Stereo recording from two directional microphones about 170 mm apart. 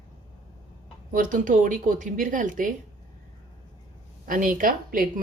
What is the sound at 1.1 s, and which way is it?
A woman's voice, 50° right (ahead or behind).